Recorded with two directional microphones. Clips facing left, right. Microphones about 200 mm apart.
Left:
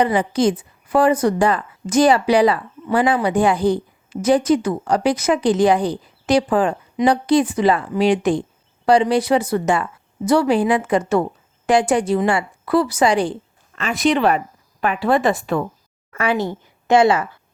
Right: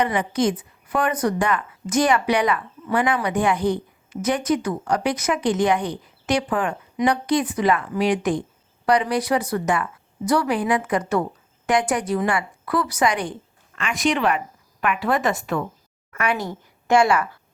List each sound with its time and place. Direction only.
0.0 s a woman's voice: 30° left (ahead or behind)